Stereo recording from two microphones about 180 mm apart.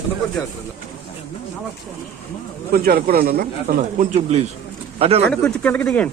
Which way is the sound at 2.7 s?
55° right (ahead or behind).